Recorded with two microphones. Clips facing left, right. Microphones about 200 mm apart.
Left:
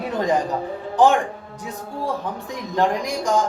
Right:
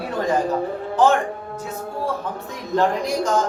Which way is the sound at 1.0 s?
15° left (ahead or behind).